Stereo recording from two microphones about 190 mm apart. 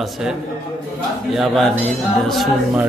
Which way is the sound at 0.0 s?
5° right (ahead or behind).